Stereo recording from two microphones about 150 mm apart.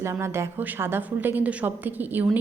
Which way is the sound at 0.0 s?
20° right (ahead or behind).